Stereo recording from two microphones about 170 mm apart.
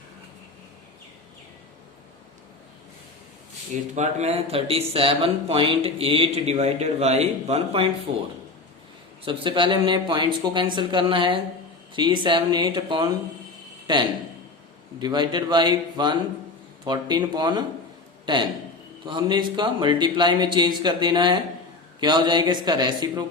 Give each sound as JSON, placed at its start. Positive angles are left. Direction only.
{"t": 3.9, "sound": "speech", "side_deg": -40}
{"t": 9.2, "sound": "speech", "side_deg": -30}